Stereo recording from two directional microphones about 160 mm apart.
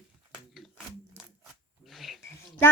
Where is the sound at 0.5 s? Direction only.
Centre (ahead or behind).